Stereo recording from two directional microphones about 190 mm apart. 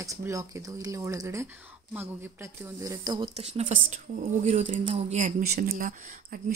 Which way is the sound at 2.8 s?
20° right (ahead or behind).